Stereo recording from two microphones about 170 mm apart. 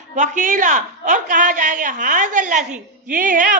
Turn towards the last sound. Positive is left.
turn(degrees=-50)  # may be behind; listen again after turning